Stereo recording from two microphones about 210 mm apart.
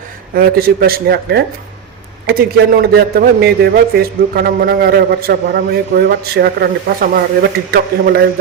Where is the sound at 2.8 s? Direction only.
50° right (ahead or behind).